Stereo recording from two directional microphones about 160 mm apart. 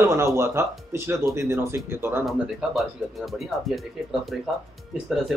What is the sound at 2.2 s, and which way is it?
Speech, centre (ahead or behind).